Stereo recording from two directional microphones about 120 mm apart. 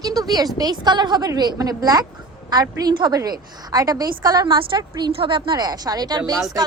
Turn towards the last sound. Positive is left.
turn(degrees=-35)  # may be behind; listen again after turning